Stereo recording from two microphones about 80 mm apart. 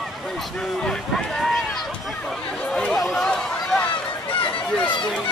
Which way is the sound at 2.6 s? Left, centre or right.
Centre.